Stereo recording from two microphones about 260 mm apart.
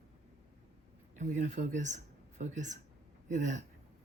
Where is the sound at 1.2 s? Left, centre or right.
Right.